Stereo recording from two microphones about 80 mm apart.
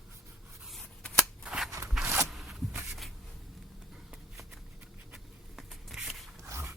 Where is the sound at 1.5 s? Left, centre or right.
Centre.